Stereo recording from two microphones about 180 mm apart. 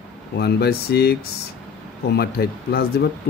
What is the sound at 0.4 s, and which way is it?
Speech, 65° left (ahead or behind).